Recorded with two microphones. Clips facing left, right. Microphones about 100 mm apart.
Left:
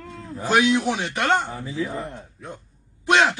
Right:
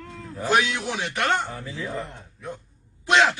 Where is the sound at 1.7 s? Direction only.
10° left (ahead or behind).